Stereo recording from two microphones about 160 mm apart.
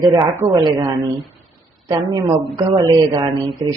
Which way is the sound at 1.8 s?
25° right (ahead or behind).